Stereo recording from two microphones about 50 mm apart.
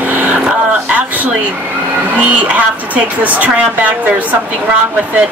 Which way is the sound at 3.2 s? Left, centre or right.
Right.